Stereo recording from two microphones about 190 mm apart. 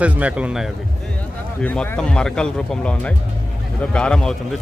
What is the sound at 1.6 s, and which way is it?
Speech, 10° left (ahead or behind).